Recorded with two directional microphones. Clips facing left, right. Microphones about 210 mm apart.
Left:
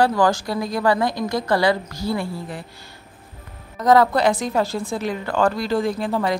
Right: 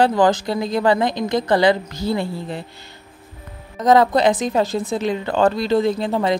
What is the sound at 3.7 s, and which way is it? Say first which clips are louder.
A woman's voice: right 1 dB; 20° right (ahead or behind).